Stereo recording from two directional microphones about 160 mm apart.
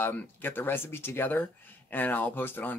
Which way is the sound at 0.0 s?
10° left (ahead or behind).